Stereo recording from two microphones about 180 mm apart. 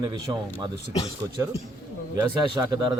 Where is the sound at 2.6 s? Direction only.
20° right (ahead or behind).